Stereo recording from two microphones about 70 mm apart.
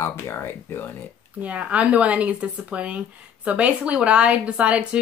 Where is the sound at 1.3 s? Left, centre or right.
Centre.